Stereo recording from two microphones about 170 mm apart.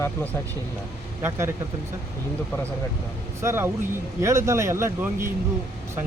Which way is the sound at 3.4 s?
15° right (ahead or behind).